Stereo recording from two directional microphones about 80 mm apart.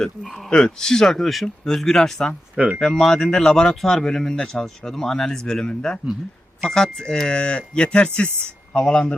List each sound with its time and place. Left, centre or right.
0.0 s speech: centre